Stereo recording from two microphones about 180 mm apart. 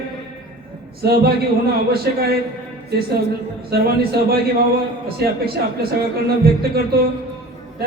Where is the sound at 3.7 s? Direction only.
60° right (ahead or behind).